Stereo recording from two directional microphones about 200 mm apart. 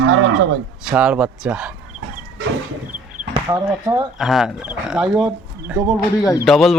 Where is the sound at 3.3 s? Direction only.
15° right (ahead or behind).